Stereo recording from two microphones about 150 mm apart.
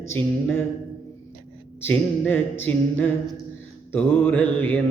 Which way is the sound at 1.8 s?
15° left (ahead or behind).